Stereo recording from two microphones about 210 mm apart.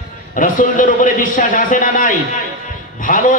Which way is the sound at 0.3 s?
40° left (ahead or behind).